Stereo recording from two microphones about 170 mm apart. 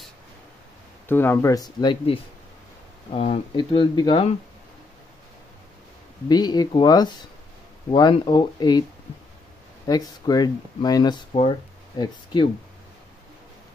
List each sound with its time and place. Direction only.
1.0 s speech: 15° left (ahead or behind)
3.1 s speech: 40° left (ahead or behind)
6.2 s speech: 25° left (ahead or behind)
9.8 s speech: 20° left (ahead or behind)